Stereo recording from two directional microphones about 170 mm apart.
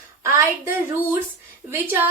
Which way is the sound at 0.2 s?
15° right (ahead or behind).